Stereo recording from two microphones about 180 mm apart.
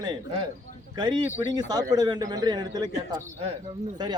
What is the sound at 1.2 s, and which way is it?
A man's voice, 15° right (ahead or behind).